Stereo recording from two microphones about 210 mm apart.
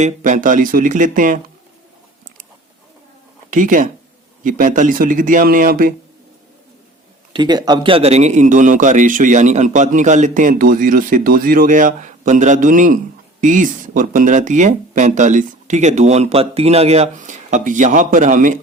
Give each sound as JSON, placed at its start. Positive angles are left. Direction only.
{"t": 0.0, "sound": "a man's voice", "side_deg": -40}
{"t": 3.5, "sound": "a man's voice", "side_deg": -40}
{"t": 7.3, "sound": "a man's voice", "side_deg": -20}